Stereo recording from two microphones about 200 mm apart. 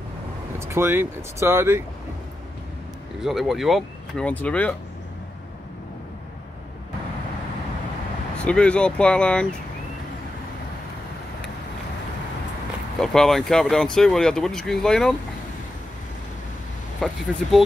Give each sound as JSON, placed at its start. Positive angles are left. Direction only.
{"t": 0.6, "sound": "speech", "side_deg": -10}
{"t": 3.2, "sound": "speech", "side_deg": 0}
{"t": 8.4, "sound": "speech", "side_deg": 5}
{"t": 13.0, "sound": "speech", "side_deg": 0}
{"t": 17.0, "sound": "speech", "side_deg": 0}